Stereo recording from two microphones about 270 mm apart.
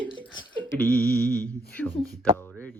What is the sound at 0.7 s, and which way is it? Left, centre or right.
Speech, centre.